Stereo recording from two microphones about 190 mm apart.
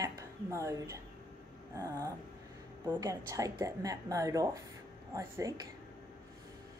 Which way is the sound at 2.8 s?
20° right (ahead or behind).